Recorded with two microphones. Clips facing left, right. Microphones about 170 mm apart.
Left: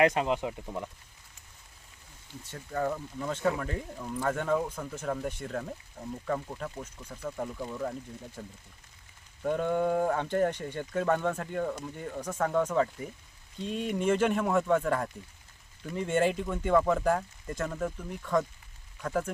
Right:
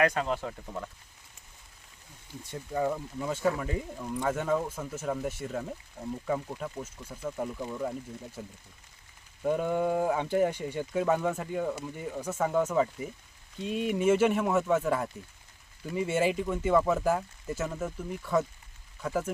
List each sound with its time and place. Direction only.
0.0 s speech: 20° left (ahead or behind)
2.4 s speech: 10° right (ahead or behind)